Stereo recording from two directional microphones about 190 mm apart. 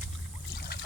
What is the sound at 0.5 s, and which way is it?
Boat, 60° left (ahead or behind).